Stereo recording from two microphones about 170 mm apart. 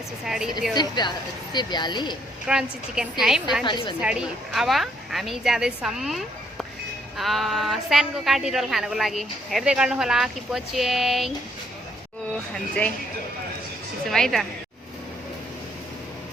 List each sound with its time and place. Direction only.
0.3 s speech: centre (ahead or behind)
0.7 s speech: 25° left (ahead or behind)
2.5 s speech: 5° right (ahead or behind)
3.6 s speech: 25° left (ahead or behind)
4.0 s speech: 5° right (ahead or behind)
12.3 s speech: 5° left (ahead or behind)
14.1 s speech: centre (ahead or behind)